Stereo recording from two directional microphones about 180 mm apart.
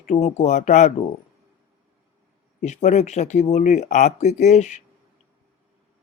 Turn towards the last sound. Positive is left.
turn(degrees=40)  # may be behind; listen again after turning